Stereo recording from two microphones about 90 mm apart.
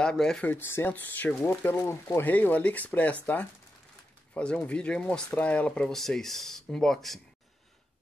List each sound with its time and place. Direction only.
0.0 s speech: 5° left (ahead or behind)
0.5 s speech: 25° left (ahead or behind)
2.3 s speech: 15° left (ahead or behind)
4.3 s speech: 15° left (ahead or behind)